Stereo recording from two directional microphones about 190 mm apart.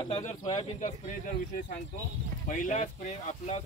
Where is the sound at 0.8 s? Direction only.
45° left (ahead or behind).